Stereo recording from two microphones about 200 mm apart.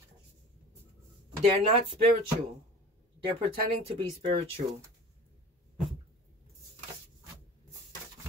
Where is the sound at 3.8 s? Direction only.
30° right (ahead or behind).